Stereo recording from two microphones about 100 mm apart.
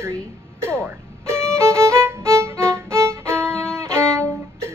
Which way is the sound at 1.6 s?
30° right (ahead or behind).